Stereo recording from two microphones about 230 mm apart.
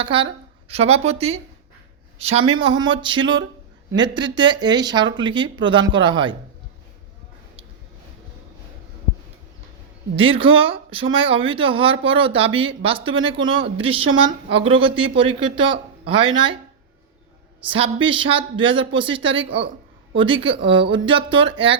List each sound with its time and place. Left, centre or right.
0.0 s a woman's voice: right
10.2 s speech: right
17.7 s speech: right